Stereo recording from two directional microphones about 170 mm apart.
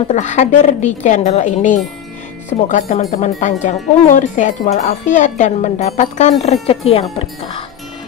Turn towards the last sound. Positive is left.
turn(degrees=30)  # may be behind; listen again after turning